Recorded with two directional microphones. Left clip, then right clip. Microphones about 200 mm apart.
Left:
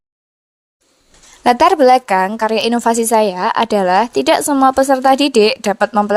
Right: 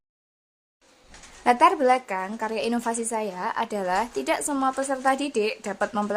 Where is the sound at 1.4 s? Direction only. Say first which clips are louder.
Left 9 dB; 45° left (ahead or behind).